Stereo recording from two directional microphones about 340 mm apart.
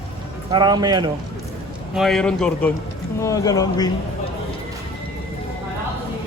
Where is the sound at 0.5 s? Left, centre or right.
Centre.